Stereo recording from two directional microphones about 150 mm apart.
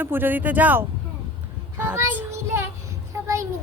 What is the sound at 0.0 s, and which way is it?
Speech, 15° right (ahead or behind).